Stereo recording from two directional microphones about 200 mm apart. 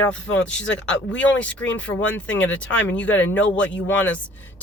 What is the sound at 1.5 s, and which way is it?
Speech, 5° left (ahead or behind).